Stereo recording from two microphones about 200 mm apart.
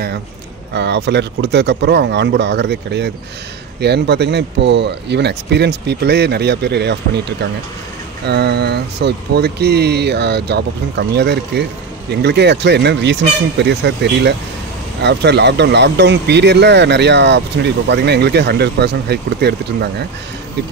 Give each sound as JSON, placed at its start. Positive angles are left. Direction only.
{"t": 0.7, "sound": "speech", "side_deg": -60}